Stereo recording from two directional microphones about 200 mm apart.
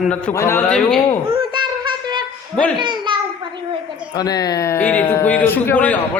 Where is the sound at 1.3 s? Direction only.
20° right (ahead or behind).